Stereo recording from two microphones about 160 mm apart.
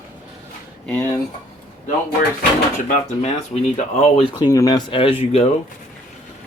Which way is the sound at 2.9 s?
45° left (ahead or behind).